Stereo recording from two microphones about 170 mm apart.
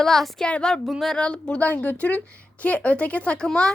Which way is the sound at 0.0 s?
Centre (ahead or behind).